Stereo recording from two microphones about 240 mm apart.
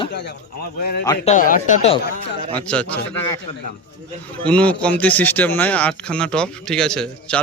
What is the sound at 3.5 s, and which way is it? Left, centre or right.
Speech, left.